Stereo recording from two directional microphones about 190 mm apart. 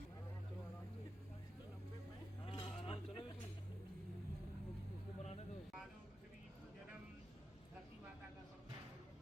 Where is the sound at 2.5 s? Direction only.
30° left (ahead or behind).